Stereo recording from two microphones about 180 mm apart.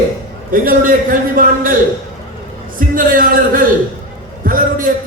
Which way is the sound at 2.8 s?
50° right (ahead or behind).